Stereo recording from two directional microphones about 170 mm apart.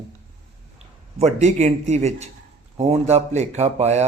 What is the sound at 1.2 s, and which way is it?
Speech, 40° right (ahead or behind).